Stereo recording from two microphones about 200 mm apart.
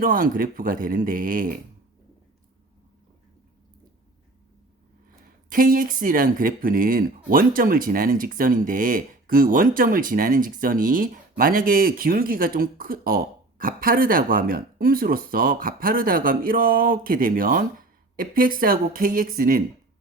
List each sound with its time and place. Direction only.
0.0 s speech: 45° right (ahead or behind)
5.5 s speech: 45° right (ahead or behind)